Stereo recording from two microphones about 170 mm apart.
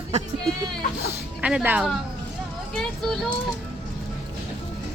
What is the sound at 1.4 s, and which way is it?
Speech, 10° right (ahead or behind).